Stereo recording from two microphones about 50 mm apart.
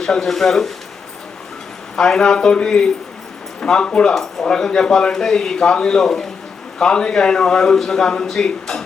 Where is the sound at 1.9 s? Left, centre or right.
Centre.